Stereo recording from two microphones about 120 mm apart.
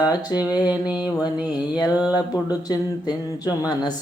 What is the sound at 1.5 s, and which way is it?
Speech, 35° left (ahead or behind).